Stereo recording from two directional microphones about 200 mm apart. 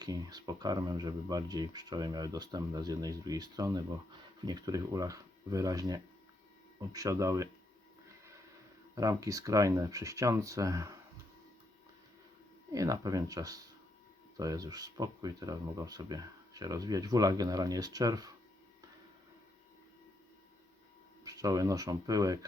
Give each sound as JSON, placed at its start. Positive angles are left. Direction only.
{"t": 0.0, "sound": "speech", "side_deg": -20}
{"t": 9.0, "sound": "speech", "side_deg": -15}
{"t": 12.7, "sound": "speech", "side_deg": -15}
{"t": 21.2, "sound": "speech", "side_deg": -15}